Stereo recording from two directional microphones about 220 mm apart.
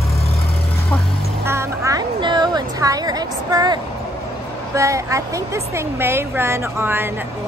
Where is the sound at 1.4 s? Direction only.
10° right (ahead or behind).